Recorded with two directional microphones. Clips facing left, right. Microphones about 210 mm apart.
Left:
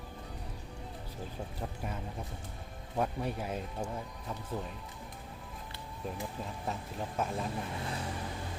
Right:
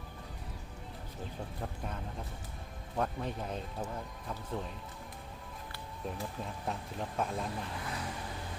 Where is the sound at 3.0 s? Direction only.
10° left (ahead or behind).